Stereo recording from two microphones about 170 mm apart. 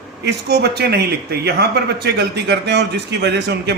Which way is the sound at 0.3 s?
75° right (ahead or behind).